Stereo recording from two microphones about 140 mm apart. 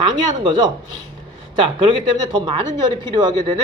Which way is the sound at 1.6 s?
35° right (ahead or behind).